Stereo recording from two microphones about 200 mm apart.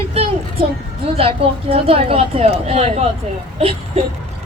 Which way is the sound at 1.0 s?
30° right (ahead or behind).